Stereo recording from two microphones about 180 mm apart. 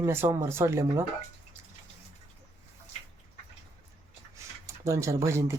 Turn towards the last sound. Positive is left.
turn(degrees=-15)  # may be behind; listen again after turning